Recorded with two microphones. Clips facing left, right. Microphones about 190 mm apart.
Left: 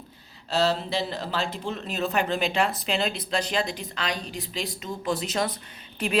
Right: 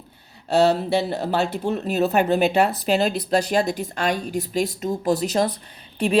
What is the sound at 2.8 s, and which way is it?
Speech, 45° right (ahead or behind).